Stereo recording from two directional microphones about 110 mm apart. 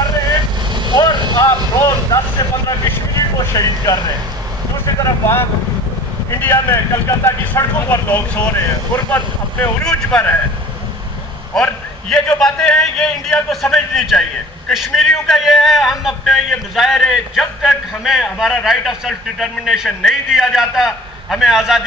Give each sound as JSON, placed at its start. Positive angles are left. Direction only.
{"t": 0.9, "sound": "vehicle", "side_deg": 40}
{"t": 1.4, "sound": "vehicle", "side_deg": 25}
{"t": 3.3, "sound": "speech", "side_deg": 30}
{"t": 4.8, "sound": "speech", "side_deg": 20}
{"t": 11.6, "sound": "a man's voice", "side_deg": 10}